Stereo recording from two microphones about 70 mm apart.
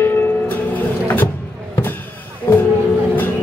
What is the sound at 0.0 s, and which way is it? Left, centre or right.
Music, left.